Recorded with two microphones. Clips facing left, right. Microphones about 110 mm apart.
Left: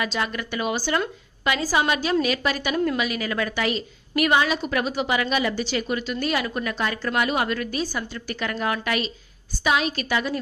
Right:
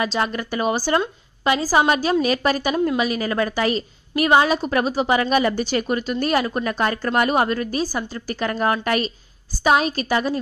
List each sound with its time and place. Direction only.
0.0 s a woman's voice: 35° right (ahead or behind)
2.7 s a woman's voice: 25° right (ahead or behind)